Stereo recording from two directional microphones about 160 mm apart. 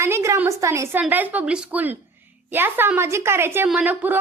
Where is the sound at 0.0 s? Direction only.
15° right (ahead or behind).